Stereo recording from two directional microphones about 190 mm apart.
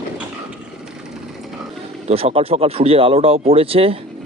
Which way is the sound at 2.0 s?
30° right (ahead or behind).